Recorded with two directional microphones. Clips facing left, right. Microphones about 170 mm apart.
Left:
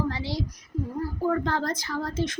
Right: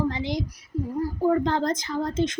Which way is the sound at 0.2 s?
20° right (ahead or behind).